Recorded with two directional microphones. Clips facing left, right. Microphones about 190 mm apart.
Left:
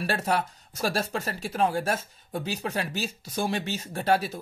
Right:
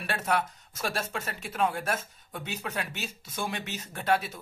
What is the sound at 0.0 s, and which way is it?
Speech, 35° left (ahead or behind).